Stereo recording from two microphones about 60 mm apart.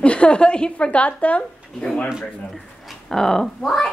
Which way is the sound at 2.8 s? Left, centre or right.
Centre.